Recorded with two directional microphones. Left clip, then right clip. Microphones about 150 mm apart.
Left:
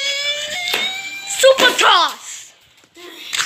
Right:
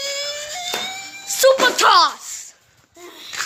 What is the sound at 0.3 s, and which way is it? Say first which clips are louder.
Music: left 6 dB; 35° right (ahead or behind).